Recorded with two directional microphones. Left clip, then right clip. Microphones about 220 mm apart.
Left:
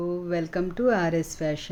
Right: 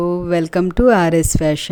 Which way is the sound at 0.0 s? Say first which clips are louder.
Right 11 dB; 50° right (ahead or behind).